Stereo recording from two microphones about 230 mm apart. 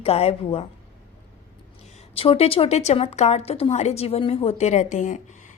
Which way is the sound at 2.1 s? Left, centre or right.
Left.